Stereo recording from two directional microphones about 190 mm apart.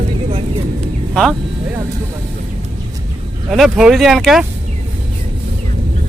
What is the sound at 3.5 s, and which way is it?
Speech, centre (ahead or behind).